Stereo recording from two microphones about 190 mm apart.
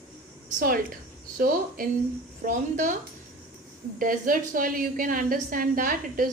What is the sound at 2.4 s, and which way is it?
Speech, 45° right (ahead or behind).